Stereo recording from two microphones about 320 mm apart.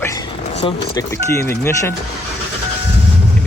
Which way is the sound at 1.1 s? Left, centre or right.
Centre.